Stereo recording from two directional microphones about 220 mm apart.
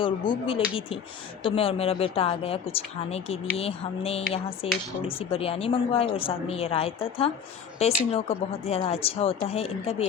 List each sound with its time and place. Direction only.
0.0 s speech: 25° left (ahead or behind)